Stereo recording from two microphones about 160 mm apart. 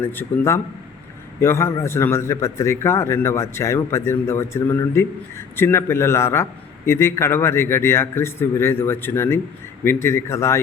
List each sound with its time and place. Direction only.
0.0 s a man's voice: 15° left (ahead or behind)